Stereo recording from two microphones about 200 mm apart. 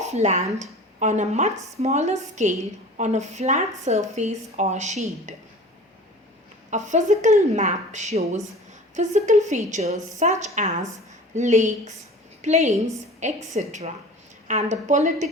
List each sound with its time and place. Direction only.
0.0 s a woman's voice: 35° right (ahead or behind)
6.7 s a woman's voice: 35° right (ahead or behind)